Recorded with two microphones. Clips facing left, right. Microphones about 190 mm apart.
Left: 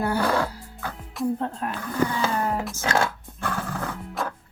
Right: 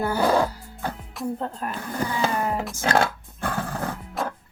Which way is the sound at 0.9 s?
Centre (ahead or behind).